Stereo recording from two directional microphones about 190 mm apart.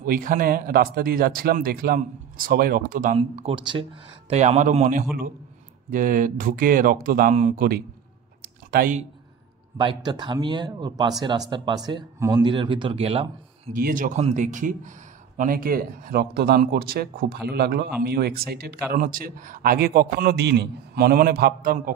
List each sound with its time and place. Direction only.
0.0 s speech: 45° right (ahead or behind)
3.2 s a man's voice: 30° right (ahead or behind); by 9.0 s 50° right (ahead or behind)
9.8 s speech: 25° right (ahead or behind)
13.7 s speech: 45° right (ahead or behind)